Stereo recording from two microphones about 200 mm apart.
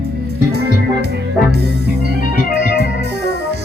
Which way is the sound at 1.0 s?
55° right (ahead or behind).